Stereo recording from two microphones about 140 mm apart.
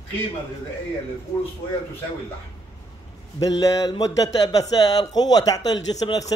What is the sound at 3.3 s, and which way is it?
Speech, 25° left (ahead or behind).